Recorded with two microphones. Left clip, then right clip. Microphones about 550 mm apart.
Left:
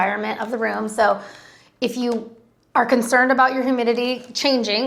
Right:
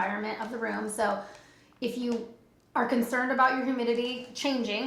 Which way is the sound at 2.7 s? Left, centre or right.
Left.